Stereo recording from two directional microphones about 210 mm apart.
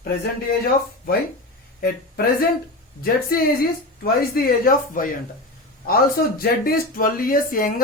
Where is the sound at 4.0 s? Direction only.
45° left (ahead or behind).